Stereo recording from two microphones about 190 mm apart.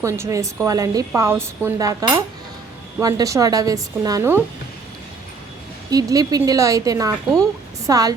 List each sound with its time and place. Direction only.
0.0 s a woman's voice: 15° right (ahead or behind)
5.9 s a woman's voice: 20° right (ahead or behind)